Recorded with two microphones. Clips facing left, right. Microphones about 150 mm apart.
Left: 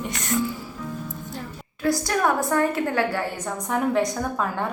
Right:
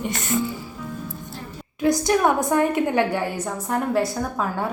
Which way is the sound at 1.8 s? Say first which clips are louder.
Right 3 dB; 20° right (ahead or behind).